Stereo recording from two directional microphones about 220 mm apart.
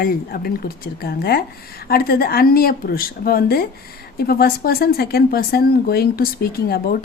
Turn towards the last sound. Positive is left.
turn(degrees=45)  # may be behind; listen again after turning